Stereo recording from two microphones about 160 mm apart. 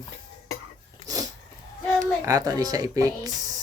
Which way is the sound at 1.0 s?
25° right (ahead or behind).